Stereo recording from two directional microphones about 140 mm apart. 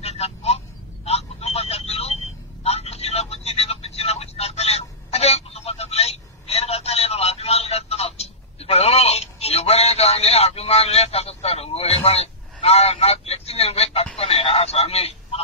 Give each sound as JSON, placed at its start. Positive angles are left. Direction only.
{"t": 0.0, "sound": "vehicle", "side_deg": 50}
{"t": 2.6, "sound": "telephone", "side_deg": 45}
{"t": 12.6, "sound": "a sound", "side_deg": 45}